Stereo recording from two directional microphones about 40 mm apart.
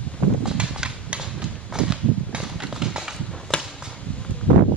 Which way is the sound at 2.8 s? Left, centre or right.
Centre.